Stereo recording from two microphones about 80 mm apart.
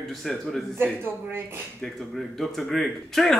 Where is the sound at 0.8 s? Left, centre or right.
Right.